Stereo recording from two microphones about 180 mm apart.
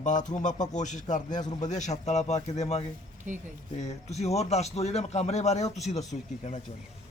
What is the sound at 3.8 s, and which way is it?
A man's voice, 40° left (ahead or behind).